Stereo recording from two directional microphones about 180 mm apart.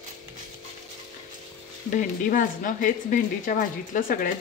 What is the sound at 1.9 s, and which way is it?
Speech, 45° left (ahead or behind).